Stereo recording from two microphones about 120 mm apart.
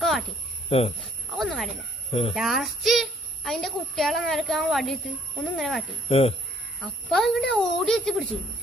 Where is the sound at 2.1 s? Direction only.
55° left (ahead or behind).